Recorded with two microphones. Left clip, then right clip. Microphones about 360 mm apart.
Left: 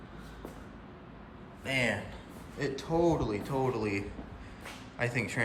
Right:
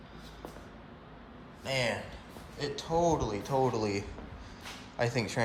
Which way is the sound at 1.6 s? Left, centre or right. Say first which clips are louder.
Left 1 dB; centre.